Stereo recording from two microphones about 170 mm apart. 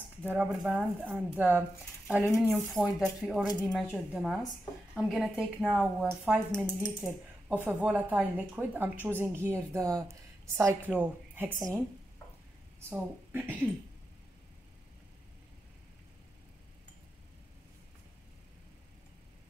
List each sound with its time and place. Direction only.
0.2 s a woman's voice: 10° right (ahead or behind)
6.5 s a woman's voice: 5° left (ahead or behind)
12.9 s speech: 10° right (ahead or behind)